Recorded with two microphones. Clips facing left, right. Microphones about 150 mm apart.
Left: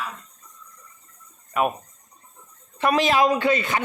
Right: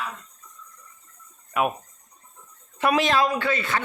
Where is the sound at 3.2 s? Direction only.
15° left (ahead or behind).